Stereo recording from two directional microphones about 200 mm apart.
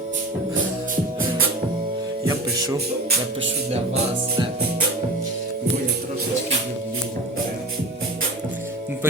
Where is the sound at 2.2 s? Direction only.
15° right (ahead or behind).